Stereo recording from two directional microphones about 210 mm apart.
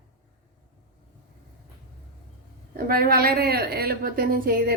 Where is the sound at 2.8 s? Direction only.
45° right (ahead or behind).